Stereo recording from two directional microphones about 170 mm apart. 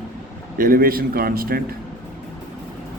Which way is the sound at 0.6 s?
60° right (ahead or behind).